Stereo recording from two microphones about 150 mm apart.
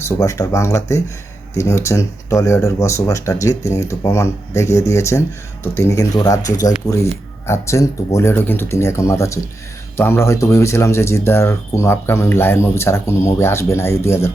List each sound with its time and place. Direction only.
0.1 s speech: 20° left (ahead or behind)